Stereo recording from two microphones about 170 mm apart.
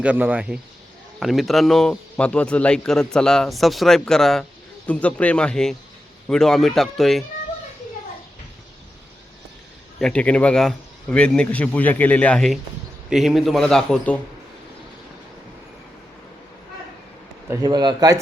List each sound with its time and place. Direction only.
0.0 s a man's voice: 10° right (ahead or behind)
10.0 s a man's voice: 5° left (ahead or behind)
17.5 s a man's voice: 25° right (ahead or behind)